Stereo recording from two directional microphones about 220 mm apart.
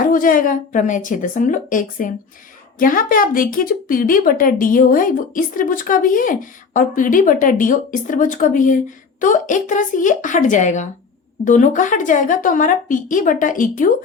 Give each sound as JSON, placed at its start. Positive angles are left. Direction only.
{"t": 0.0, "sound": "a woman's voice", "side_deg": 40}